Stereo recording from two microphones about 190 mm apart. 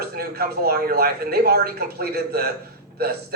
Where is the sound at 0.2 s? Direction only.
55° right (ahead or behind).